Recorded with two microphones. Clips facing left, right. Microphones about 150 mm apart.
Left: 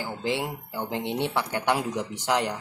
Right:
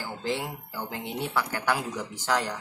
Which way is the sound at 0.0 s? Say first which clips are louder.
Left 3 dB; 15° left (ahead or behind).